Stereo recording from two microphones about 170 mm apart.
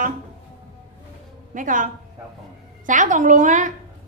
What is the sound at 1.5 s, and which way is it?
Speech, 50° right (ahead or behind).